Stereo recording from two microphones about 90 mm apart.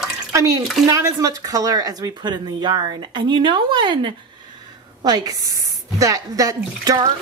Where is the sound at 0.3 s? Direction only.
35° right (ahead or behind); by 4.1 s 60° right (ahead or behind).